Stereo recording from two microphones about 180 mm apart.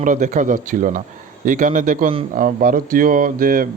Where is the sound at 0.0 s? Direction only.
45° right (ahead or behind).